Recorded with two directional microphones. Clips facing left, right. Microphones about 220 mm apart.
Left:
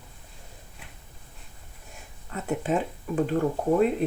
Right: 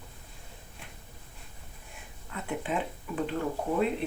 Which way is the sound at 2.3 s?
45° left (ahead or behind).